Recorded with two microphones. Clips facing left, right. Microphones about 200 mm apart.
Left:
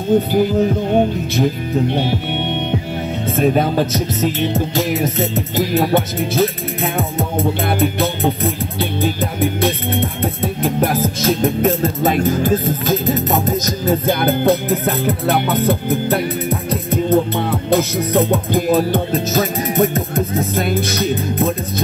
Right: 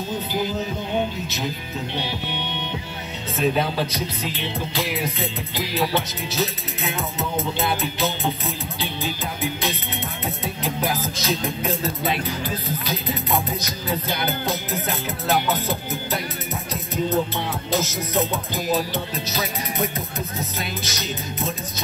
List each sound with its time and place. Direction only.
0.1 s music: 55° left (ahead or behind)